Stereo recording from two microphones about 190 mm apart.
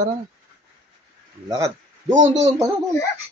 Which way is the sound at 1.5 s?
15° right (ahead or behind).